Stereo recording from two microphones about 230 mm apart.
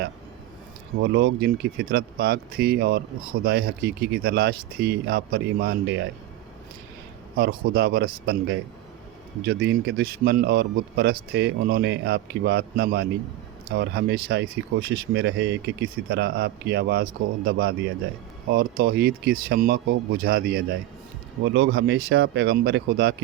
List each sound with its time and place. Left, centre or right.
1.1 s speech: right
7.7 s speech: right